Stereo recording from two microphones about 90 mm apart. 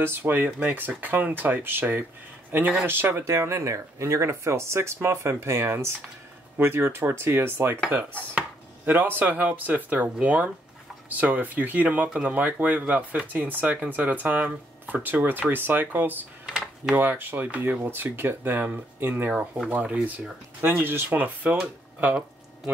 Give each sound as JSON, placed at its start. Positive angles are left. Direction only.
{"t": 0.0, "sound": "speech", "side_deg": -25}
{"t": 16.4, "sound": "a sound", "side_deg": -5}
{"t": 16.9, "sound": "speech", "side_deg": -20}